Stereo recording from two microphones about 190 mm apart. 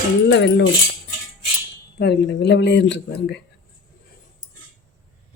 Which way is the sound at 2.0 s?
60° left (ahead or behind).